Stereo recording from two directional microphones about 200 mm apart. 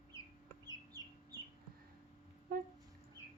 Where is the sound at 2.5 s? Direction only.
45° right (ahead or behind).